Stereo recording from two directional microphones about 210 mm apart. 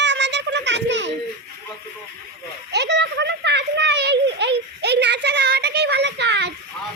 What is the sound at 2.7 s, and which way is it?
A child's voice, 55° right (ahead or behind).